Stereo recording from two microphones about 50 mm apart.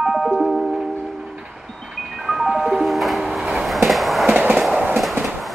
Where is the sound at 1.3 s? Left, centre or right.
Centre.